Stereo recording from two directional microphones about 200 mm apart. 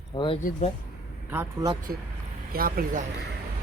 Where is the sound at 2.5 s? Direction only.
45° right (ahead or behind).